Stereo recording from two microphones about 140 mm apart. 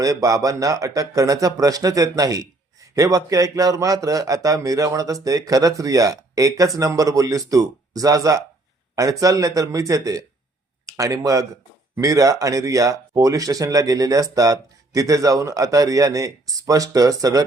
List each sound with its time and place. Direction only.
0.0 s speech: 25° right (ahead or behind)